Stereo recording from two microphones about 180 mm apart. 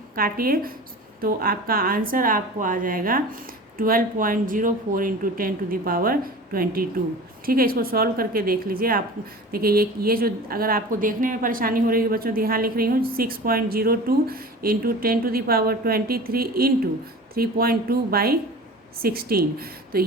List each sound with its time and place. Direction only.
0.2 s a woman's voice: 55° right (ahead or behind)